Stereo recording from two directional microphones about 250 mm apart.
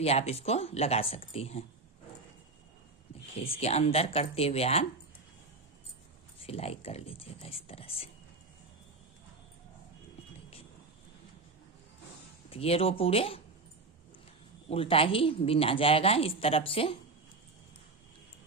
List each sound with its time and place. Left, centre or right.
0.0 s a woman's voice: left
3.3 s a woman's voice: left
6.4 s a woman's voice: left
12.5 s a woman's voice: left
14.7 s a woman's voice: left